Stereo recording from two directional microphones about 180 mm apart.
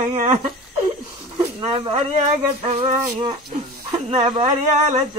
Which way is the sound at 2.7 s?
40° right (ahead or behind).